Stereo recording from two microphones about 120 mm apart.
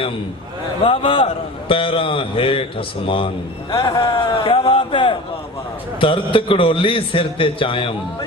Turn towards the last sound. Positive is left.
turn(degrees=45)  # may be behind; listen again after turning